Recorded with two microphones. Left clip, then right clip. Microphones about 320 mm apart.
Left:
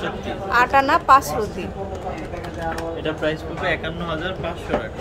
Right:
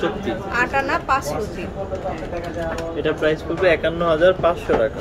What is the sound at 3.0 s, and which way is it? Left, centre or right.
Speech, centre.